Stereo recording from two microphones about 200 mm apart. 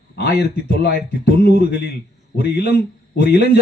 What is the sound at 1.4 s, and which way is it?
A man's voice, 55° left (ahead or behind).